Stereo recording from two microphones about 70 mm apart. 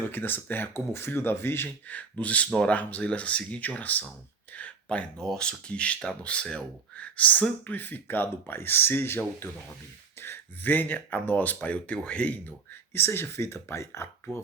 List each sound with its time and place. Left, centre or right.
0.1 s speech: left
1.9 s speech: left
4.5 s a sound: centre
5.1 s speech: centre
5.4 s speech: centre; by 14.1 s left